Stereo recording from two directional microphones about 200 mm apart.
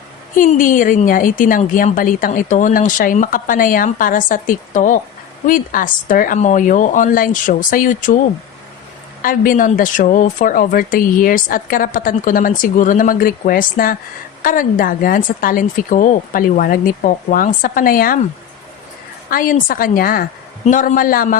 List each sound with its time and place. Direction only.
0.3 s a woman's voice: 40° left (ahead or behind)
9.2 s speech: 45° left (ahead or behind)
19.3 s speech: 45° left (ahead or behind)